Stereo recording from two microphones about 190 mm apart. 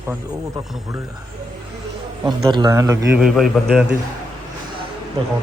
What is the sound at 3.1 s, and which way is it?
Speech, centre (ahead or behind).